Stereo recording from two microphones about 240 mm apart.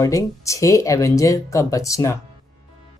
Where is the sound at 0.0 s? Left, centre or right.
Centre.